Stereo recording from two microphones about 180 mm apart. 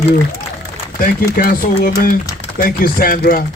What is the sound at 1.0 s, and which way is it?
A man's voice, 55° left (ahead or behind).